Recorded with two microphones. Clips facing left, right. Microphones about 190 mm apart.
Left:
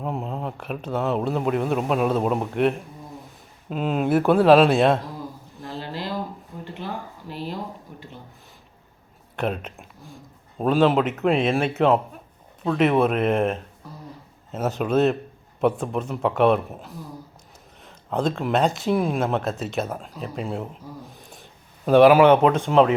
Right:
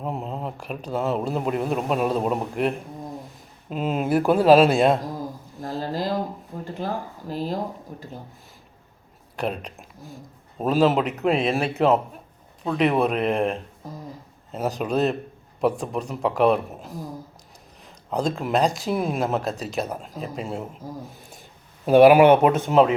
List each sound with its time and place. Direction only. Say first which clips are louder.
0.0 s speech: left 1 dB; centre (ahead or behind)
5.6 s a sound: right 5 dB; 40° right (ahead or behind)
9.3 s speech: left 1 dB; centre (ahead or behind)
14.8 s speech: left 3 dB; centre (ahead or behind)
21.1 s a sound: even; centre (ahead or behind)
21.8 s speech: right 1 dB; 5° right (ahead or behind)